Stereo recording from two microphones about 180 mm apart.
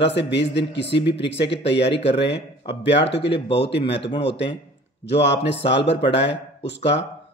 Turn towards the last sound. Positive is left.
turn(degrees=75)  # may be behind; listen again after turning